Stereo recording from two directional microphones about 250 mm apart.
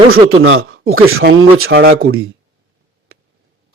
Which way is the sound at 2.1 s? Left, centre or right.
Right.